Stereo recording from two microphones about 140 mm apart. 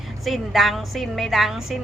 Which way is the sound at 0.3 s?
Centre (ahead or behind).